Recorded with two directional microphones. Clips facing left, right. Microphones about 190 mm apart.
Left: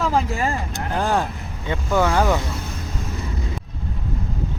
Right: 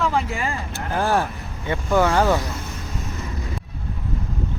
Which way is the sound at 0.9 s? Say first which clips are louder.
Right 1 dB; 15° left (ahead or behind).